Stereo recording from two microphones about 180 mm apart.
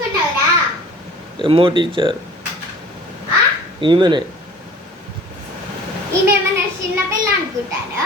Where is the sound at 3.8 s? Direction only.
25° right (ahead or behind).